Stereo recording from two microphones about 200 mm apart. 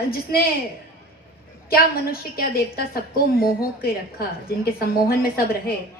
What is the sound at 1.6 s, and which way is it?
A woman's voice, 50° left (ahead or behind).